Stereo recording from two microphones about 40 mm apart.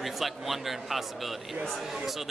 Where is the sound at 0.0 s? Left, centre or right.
Centre.